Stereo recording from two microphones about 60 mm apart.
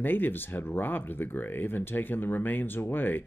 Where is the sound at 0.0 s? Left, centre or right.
Left.